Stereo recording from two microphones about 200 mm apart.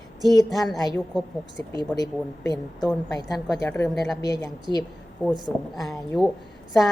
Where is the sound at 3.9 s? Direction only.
Centre (ahead or behind).